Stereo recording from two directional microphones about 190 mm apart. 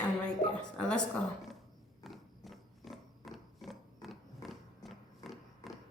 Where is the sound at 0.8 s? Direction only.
5° left (ahead or behind).